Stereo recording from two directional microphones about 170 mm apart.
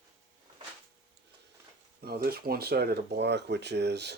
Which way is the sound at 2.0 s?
65° right (ahead or behind).